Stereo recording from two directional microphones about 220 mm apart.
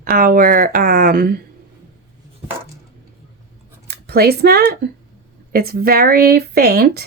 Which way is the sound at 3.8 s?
45° right (ahead or behind).